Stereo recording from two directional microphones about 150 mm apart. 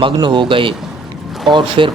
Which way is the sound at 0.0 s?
30° right (ahead or behind).